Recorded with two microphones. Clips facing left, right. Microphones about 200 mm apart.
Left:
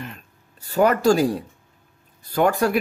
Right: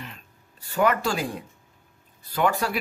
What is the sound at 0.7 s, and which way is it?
A man's voice, 40° left (ahead or behind).